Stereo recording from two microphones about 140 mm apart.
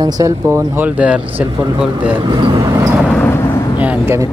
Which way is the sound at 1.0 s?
10° right (ahead or behind).